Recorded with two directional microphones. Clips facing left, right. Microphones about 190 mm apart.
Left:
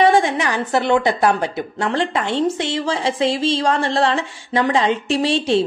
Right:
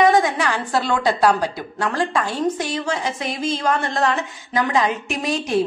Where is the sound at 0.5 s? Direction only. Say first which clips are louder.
Left 4 dB; 20° left (ahead or behind).